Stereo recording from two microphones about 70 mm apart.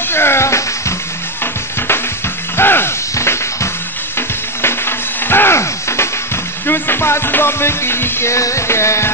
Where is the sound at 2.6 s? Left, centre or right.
Left.